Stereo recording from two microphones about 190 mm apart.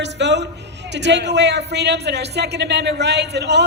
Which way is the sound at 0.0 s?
65° right (ahead or behind).